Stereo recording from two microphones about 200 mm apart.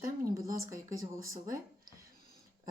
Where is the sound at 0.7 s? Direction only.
15° right (ahead or behind).